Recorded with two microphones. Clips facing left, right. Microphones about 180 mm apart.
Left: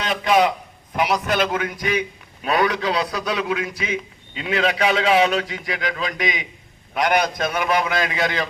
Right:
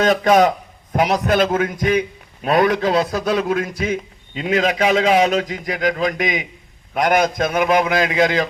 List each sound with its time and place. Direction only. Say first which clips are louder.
0.0 s a man's voice: right 5 dB; 45° right (ahead or behind)